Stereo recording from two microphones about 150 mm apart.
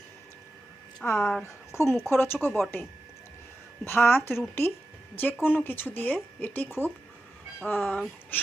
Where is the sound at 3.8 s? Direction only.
15° left (ahead or behind).